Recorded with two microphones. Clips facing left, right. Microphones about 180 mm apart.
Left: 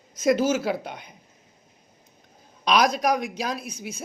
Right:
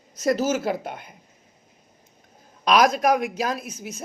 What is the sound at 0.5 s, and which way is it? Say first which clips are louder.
Speech: right 1 dB; 50° right (ahead or behind).